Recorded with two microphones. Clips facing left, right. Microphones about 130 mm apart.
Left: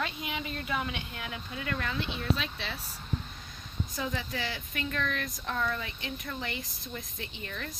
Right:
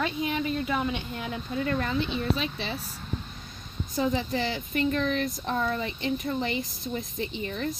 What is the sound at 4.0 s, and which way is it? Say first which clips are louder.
Speech: right 9 dB; 30° right (ahead or behind).